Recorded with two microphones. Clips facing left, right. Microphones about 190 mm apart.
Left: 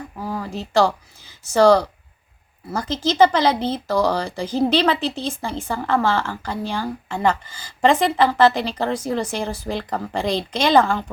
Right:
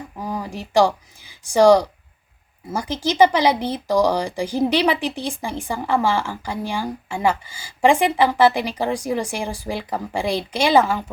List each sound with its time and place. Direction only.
0.2 s speech: 15° right (ahead or behind)